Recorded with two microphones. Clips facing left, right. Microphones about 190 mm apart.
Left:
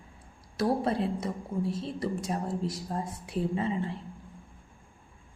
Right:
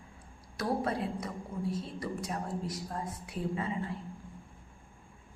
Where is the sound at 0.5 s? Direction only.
30° left (ahead or behind).